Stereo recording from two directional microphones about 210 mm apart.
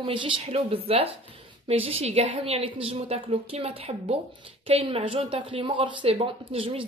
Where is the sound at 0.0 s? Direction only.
25° right (ahead or behind).